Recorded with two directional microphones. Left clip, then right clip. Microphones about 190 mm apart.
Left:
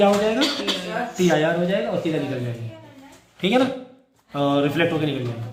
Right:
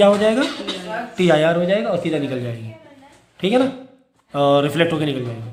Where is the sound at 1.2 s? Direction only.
60° right (ahead or behind).